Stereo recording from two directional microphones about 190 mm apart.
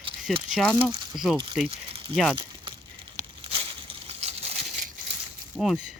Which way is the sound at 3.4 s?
30° right (ahead or behind).